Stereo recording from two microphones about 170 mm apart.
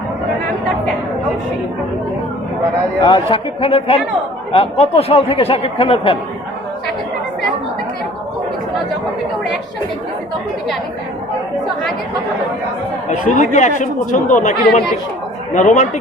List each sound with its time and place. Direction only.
3.0 s speech: 30° left (ahead or behind)
13.1 s speech: 45° left (ahead or behind)
15.5 s speech: 45° left (ahead or behind)